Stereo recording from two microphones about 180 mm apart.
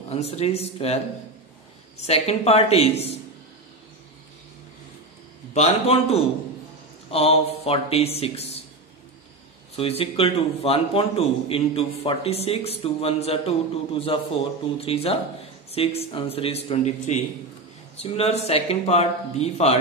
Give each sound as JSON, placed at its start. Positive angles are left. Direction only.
{"t": 0.1, "sound": "a man's voice", "side_deg": 35}
{"t": 5.5, "sound": "a man's voice", "side_deg": 35}
{"t": 9.8, "sound": "a man's voice", "side_deg": 30}